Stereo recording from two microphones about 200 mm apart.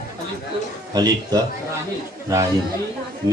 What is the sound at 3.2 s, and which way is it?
Speech, 20° right (ahead or behind).